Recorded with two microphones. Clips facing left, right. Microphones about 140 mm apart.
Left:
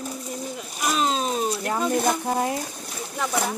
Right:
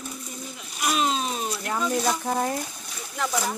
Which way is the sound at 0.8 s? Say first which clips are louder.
Left 1 dB; 35° left (ahead or behind).